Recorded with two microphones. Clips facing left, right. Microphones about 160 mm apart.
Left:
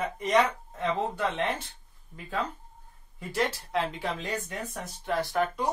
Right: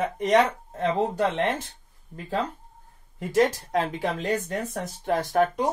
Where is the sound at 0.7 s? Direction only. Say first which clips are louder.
Right 6 dB; 40° right (ahead or behind).